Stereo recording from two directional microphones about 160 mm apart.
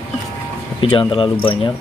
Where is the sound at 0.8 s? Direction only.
35° left (ahead or behind).